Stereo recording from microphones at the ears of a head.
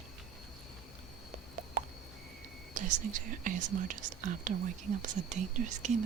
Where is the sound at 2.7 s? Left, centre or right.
Right.